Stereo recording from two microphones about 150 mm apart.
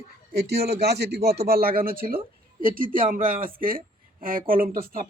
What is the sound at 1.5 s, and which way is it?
Speech, 80° right.